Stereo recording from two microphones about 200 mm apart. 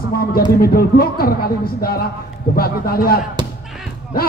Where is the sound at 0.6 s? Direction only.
50° left (ahead or behind).